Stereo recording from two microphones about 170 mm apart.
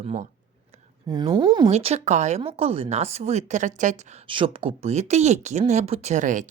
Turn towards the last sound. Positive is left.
turn(degrees=-45)  # may be behind; listen again after turning